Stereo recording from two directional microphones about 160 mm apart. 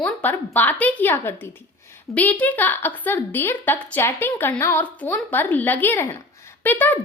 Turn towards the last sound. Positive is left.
turn(degrees=10)  # may be behind; listen again after turning